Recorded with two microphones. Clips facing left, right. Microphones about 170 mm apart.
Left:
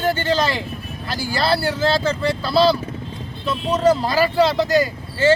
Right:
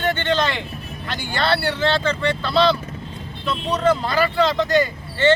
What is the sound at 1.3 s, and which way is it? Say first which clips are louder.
Speech: left 1 dB; 5° left (ahead or behind).